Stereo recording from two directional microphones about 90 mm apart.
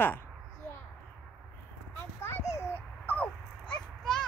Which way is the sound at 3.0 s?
15° left (ahead or behind).